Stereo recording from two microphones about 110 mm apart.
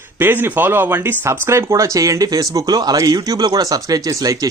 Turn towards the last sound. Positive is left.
turn(degrees=-35)  # may be behind; listen again after turning